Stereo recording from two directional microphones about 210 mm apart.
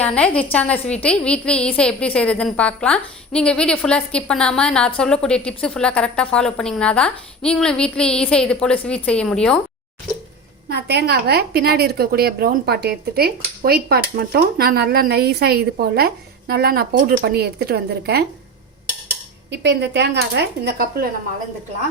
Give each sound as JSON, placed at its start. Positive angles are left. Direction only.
{"t": 0.0, "sound": "a woman's voice", "side_deg": 5}
{"t": 10.7, "sound": "a woman's voice", "side_deg": -50}
{"t": 19.5, "sound": "a woman's voice", "side_deg": -55}